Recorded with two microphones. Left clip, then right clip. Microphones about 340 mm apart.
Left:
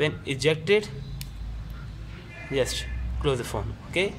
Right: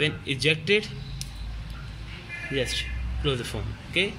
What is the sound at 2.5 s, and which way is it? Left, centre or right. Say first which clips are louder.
Speech: left 2 dB; left.